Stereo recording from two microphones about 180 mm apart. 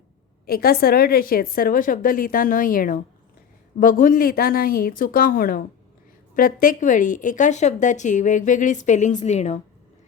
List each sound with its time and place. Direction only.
0.4 s speech: 55° left (ahead or behind); by 9.6 s 40° left (ahead or behind)